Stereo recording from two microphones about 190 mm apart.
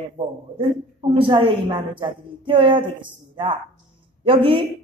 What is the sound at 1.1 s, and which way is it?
A woman's voice, 25° right (ahead or behind).